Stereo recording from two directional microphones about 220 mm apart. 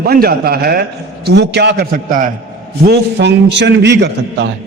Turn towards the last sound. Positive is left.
turn(degrees=-50)  # may be behind; listen again after turning